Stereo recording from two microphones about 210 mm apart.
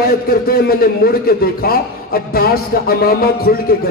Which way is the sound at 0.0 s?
45° left (ahead or behind).